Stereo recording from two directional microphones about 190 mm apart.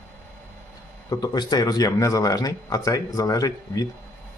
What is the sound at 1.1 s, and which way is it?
Speech, 20° left (ahead or behind).